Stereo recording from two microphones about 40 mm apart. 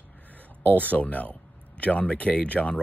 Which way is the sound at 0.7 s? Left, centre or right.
Left.